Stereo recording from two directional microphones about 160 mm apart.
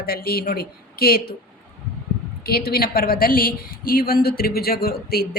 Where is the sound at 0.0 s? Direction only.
70° left (ahead or behind).